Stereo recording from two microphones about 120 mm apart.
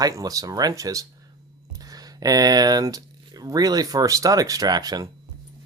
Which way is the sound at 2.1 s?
30° right (ahead or behind).